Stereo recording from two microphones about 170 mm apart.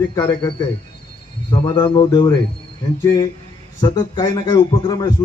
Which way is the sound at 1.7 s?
25° left (ahead or behind).